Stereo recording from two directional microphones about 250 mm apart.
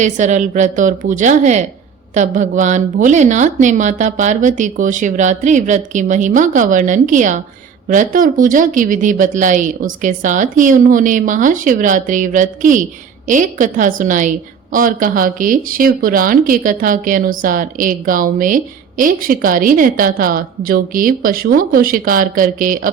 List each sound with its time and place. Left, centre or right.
0.0 s a woman's voice: right